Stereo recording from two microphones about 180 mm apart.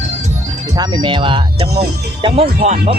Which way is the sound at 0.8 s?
25° right (ahead or behind).